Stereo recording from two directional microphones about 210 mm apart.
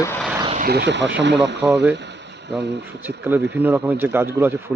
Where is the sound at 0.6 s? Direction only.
50° right (ahead or behind).